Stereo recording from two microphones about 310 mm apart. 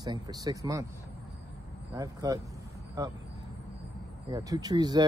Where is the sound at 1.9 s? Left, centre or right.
Centre.